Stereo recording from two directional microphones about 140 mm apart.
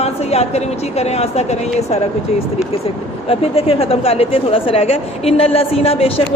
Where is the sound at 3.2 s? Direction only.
45° left (ahead or behind).